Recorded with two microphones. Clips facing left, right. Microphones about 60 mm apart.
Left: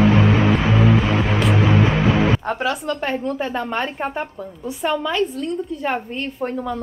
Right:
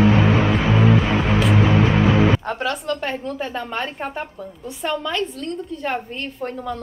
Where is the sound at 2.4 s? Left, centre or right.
Centre.